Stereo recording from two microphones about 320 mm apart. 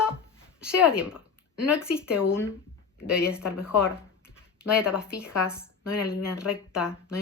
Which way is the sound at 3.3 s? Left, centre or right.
Centre.